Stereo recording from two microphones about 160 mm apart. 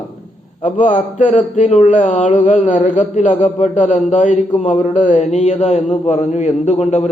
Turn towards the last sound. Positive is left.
turn(degrees=45)  # may be behind; listen again after turning